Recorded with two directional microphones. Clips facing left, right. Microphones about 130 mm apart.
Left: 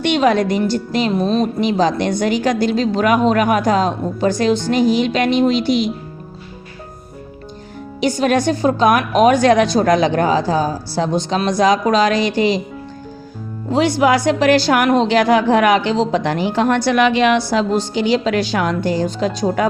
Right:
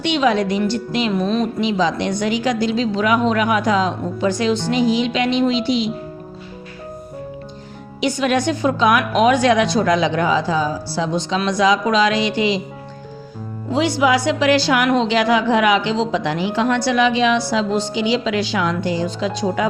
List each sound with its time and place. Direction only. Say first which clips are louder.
0.0 s a woman's voice: left 2 dB; 50° left (ahead or behind)
8.0 s a woman's voice: left 2 dB; 40° left (ahead or behind)
13.7 s a woman's voice: left 2 dB; 50° left (ahead or behind)